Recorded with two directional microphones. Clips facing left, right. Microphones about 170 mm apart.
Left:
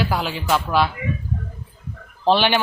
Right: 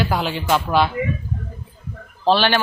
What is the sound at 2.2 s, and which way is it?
Speech, 15° left (ahead or behind).